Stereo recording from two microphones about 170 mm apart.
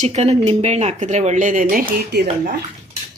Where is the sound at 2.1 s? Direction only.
80° right.